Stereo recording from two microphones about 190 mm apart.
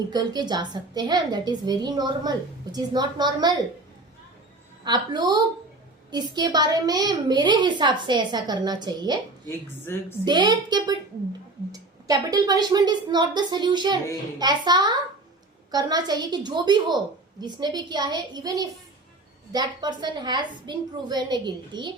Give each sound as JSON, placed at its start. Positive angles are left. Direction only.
{"t": 0.1, "sound": "a woman's voice", "side_deg": -20}
{"t": 4.8, "sound": "a woman's voice", "side_deg": -20}
{"t": 9.8, "sound": "a woman's voice", "side_deg": 10}
{"t": 10.2, "sound": "a woman's voice", "side_deg": -20}